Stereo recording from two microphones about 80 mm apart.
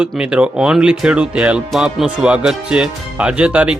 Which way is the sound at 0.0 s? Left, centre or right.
Centre.